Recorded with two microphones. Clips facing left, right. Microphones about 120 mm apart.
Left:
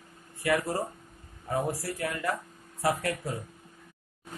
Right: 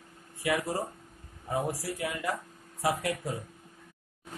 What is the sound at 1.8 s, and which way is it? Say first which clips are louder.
Speech: left 1 dB; 15° right (ahead or behind).